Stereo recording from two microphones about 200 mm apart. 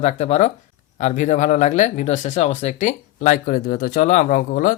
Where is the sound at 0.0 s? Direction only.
35° left (ahead or behind).